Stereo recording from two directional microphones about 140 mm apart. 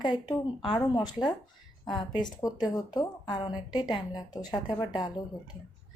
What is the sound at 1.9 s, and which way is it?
A woman's voice, 30° left (ahead or behind).